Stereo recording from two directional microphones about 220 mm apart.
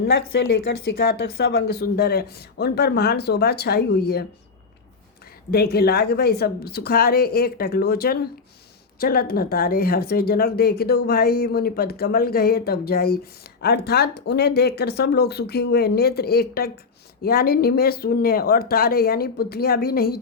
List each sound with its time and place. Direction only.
0.0 s speech: 50° left (ahead or behind)
5.5 s speech: 45° left (ahead or behind)